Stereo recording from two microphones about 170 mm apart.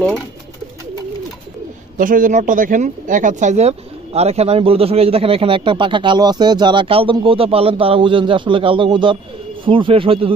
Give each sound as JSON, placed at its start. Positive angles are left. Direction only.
{"t": 2.0, "sound": "speech", "side_deg": -50}